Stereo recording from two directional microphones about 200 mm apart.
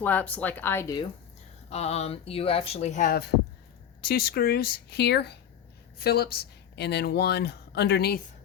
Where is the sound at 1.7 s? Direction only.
30° left (ahead or behind).